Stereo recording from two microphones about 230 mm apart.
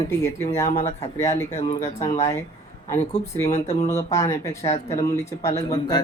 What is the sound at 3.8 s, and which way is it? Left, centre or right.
Speech, centre.